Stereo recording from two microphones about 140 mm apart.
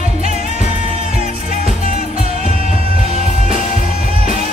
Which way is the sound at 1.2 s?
70° left (ahead or behind).